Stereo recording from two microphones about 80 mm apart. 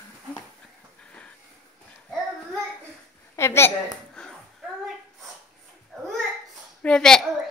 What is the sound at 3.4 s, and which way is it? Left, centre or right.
Speech, left.